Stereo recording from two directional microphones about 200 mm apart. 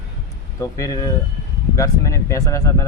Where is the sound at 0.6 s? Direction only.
15° left (ahead or behind).